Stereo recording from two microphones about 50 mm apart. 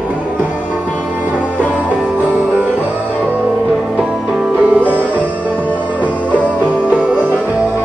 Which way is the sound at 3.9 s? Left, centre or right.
Centre.